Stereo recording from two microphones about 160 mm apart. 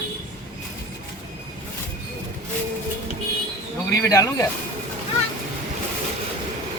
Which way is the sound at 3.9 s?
20° left (ahead or behind).